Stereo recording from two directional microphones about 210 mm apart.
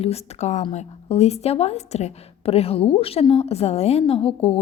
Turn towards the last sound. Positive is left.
turn(degrees=25)  # may be behind; listen again after turning